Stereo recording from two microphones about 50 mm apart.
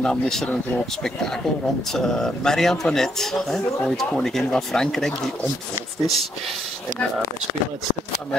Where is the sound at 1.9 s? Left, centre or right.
Centre.